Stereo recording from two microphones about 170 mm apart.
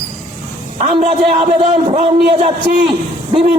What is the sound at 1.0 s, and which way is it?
A man's voice, 35° right (ahead or behind).